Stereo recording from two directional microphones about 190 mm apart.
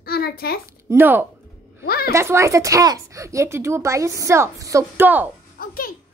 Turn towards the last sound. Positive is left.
turn(degrees=50)  # may be behind; listen again after turning